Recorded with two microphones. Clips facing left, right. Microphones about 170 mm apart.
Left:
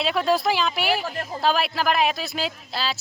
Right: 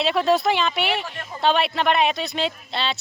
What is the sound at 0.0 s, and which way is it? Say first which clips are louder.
Speech: right 2 dB; centre (ahead or behind).